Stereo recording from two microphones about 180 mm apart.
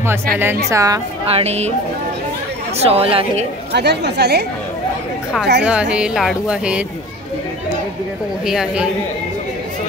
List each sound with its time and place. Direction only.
0.7 s a woman's voice: 20° right (ahead or behind)
1.2 s a woman's voice: 35° right (ahead or behind)
2.8 s a woman's voice: 35° right (ahead or behind)
3.7 s speech: 65° right (ahead or behind)
5.6 s speech: 5° right (ahead or behind)
8.5 s speech: 5° right (ahead or behind)